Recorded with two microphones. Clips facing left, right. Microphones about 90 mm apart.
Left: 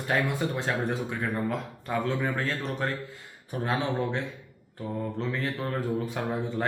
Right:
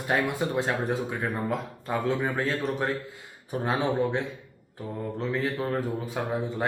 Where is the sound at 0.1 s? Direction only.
15° right (ahead or behind).